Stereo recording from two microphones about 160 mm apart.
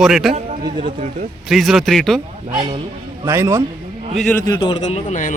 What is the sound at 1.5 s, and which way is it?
Speech, centre (ahead or behind).